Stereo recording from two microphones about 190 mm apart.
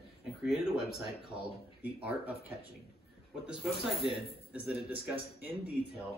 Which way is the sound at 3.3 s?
5° right (ahead or behind).